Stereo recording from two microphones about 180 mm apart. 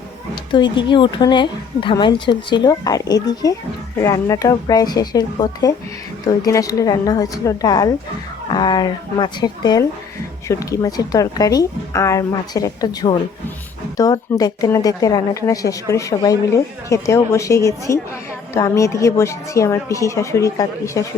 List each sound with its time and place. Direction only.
0.5 s a woman's voice: 25° left (ahead or behind)